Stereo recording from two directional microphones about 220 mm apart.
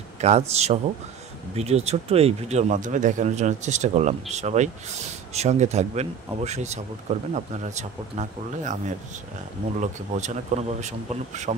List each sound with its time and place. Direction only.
0.2 s speech: 30° right (ahead or behind)